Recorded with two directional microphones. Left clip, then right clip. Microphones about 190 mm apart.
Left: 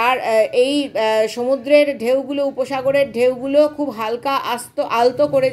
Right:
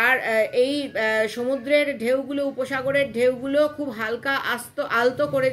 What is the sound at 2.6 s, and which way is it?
Speech, 20° left (ahead or behind).